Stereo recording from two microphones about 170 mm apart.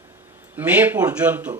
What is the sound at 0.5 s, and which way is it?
Speech, 10° right (ahead or behind).